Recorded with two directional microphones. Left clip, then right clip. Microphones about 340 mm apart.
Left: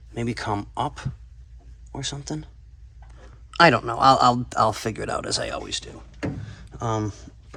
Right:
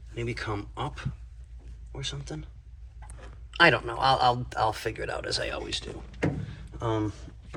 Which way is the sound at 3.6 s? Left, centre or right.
Left.